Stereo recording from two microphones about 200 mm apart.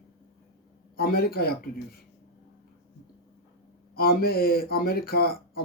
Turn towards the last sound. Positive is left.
turn(degrees=50)  # may be behind; listen again after turning